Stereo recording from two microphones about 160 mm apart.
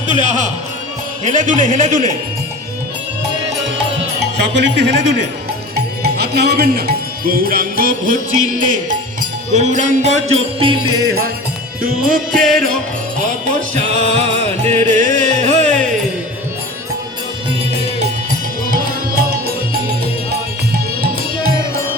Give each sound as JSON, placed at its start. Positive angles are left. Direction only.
{"t": 1.2, "sound": "music", "side_deg": -50}
{"t": 4.5, "sound": "a man's voice", "side_deg": -90}
{"t": 5.7, "sound": "music", "side_deg": -85}
{"t": 11.8, "sound": "music", "side_deg": -60}
{"t": 18.3, "sound": "music", "side_deg": -65}